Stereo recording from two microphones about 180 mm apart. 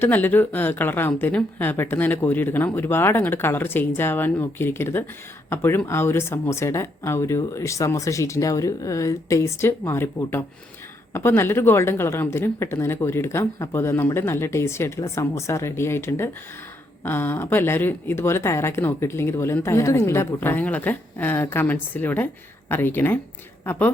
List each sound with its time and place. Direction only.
0.0 s speech: 10° left (ahead or behind)